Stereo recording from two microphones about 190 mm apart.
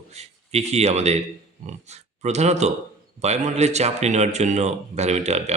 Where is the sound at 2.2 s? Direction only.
35° right (ahead or behind).